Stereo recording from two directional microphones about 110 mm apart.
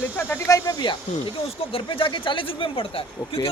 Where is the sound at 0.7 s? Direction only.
40° left (ahead or behind).